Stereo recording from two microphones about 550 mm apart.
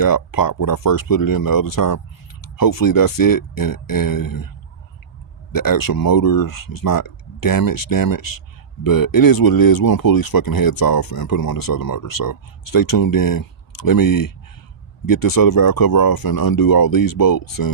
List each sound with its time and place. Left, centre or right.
0.0 s speech: left